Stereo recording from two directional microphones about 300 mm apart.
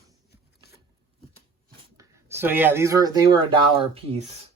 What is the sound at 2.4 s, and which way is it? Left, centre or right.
Speech, centre.